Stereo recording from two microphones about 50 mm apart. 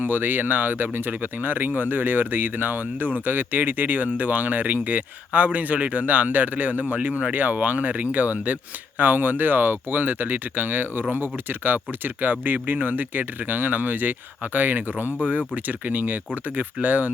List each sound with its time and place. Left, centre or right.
0.0 s speech: right